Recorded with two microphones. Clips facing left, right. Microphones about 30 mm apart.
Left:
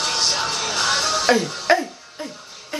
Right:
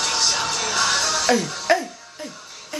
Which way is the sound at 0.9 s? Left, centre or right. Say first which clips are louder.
Left 4 dB; left.